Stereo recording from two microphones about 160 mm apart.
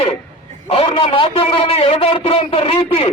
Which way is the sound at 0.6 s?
40° left (ahead or behind).